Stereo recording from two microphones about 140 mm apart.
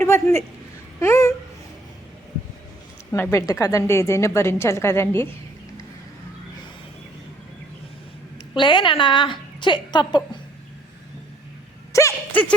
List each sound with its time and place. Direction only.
0.0 s a man's voice: 15° left (ahead or behind)
3.1 s a woman's voice: 15° left (ahead or behind)
8.5 s a woman's voice: 35° left (ahead or behind)
11.9 s a sound: 20° left (ahead or behind)